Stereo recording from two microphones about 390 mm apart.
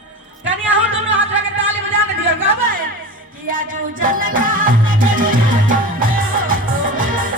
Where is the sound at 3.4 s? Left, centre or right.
Right.